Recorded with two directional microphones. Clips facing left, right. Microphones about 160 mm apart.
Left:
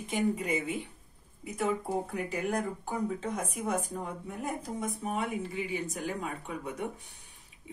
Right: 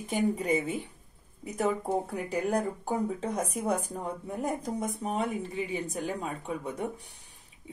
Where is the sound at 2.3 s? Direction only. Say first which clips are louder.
Right 3 dB; 35° right (ahead or behind).